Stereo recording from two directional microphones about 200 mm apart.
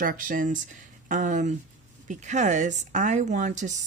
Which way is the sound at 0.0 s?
45° right (ahead or behind).